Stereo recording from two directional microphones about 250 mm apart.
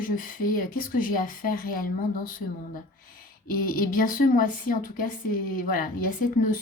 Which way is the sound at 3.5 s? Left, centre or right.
Left.